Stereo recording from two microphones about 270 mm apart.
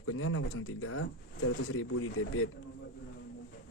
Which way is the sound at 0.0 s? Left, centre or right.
Left.